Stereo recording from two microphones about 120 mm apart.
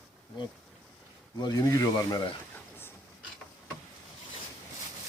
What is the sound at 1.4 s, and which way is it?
Speech, 30° left (ahead or behind).